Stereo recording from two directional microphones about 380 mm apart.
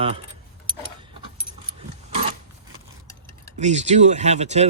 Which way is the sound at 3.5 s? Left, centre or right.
Centre.